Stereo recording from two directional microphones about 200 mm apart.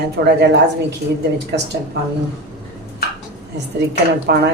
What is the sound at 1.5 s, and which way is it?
Speech, 55° right (ahead or behind).